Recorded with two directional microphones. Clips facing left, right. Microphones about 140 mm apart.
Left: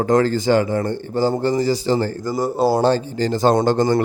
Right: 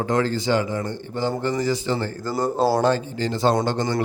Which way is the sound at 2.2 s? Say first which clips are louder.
Left 2 dB; 10° left (ahead or behind).